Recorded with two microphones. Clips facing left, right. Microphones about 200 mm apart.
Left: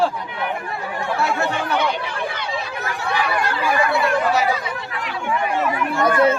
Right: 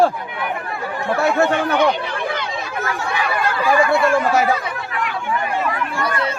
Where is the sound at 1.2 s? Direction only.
50° right (ahead or behind).